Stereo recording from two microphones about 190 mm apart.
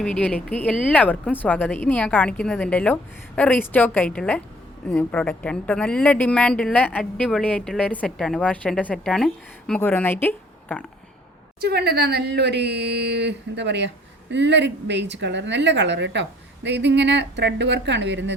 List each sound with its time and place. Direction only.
0.0 s speech: 5° left (ahead or behind)
11.6 s a woman's voice: 55° right (ahead or behind)